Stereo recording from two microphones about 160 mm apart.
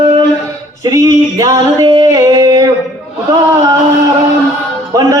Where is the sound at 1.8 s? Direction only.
25° right (ahead or behind).